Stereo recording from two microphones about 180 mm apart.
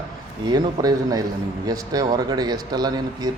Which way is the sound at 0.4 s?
20° right (ahead or behind).